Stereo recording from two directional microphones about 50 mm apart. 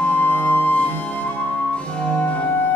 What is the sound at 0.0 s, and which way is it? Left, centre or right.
Music, left.